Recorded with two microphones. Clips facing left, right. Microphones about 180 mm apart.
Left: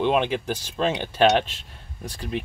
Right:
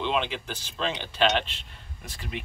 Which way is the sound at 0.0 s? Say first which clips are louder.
Left 7 dB; 50° left (ahead or behind).